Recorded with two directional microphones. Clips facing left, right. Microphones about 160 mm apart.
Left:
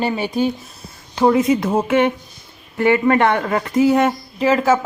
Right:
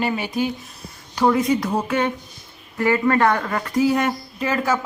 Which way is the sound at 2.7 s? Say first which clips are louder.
Left 4 dB; 25° left (ahead or behind).